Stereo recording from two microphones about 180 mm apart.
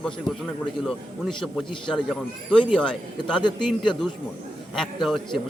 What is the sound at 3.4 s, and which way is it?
Speech, 25° left (ahead or behind).